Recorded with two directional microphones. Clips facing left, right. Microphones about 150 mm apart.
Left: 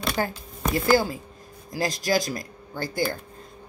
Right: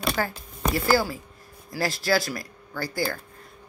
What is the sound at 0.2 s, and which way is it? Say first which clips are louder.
Speech: left 1 dB; 20° left (ahead or behind).